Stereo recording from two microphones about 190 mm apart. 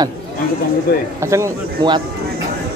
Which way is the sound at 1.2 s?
15° right (ahead or behind).